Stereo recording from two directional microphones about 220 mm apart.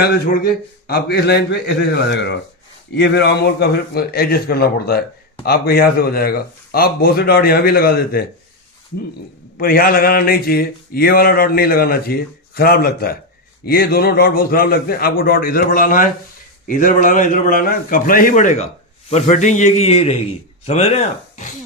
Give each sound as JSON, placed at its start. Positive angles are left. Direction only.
{"t": 0.0, "sound": "mantra", "side_deg": 45}
{"t": 9.6, "sound": "mantra", "side_deg": 40}
{"t": 15.2, "sound": "a man's voice", "side_deg": 40}